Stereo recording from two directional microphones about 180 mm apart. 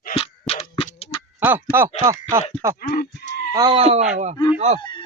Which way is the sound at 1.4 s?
10° right (ahead or behind).